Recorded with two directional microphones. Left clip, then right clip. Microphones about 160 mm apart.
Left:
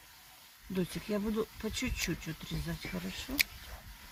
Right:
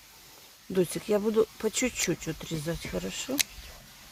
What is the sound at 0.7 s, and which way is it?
Speech, 90° right.